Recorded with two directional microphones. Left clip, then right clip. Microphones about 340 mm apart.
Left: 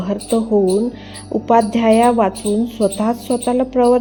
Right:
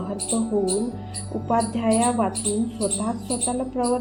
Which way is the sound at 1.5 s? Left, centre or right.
Left.